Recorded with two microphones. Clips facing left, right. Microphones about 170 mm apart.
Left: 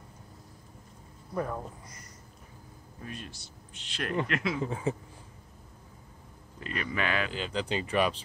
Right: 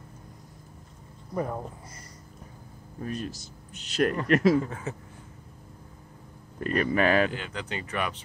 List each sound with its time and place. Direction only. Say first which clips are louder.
1.3 s speech: right 2 dB; 15° right (ahead or behind)
3.0 s speech: right 9 dB; 40° right (ahead or behind)
4.6 s speech: left 4 dB; 25° left (ahead or behind)
6.6 s speech: right 9 dB; 45° right (ahead or behind)
7.3 s speech: left 3 dB; 25° left (ahead or behind)